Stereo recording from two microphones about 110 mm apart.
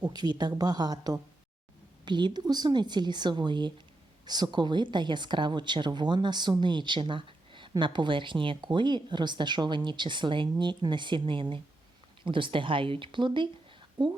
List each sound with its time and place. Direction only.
0.0 s a woman's voice: 40° right (ahead or behind)